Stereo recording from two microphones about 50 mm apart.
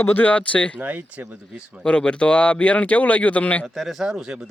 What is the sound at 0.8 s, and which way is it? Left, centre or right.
Speech, right.